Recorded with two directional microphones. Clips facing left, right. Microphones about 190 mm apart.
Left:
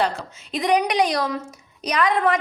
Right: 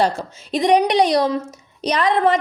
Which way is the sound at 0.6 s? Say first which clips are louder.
Right 4 dB; 30° right (ahead or behind).